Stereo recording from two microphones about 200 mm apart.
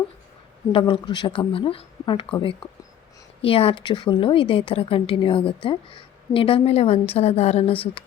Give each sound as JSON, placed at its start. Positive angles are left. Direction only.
{"t": 0.7, "sound": "speech", "side_deg": 25}